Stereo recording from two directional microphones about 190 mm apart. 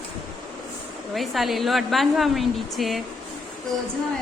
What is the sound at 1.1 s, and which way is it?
A woman's voice, centre (ahead or behind).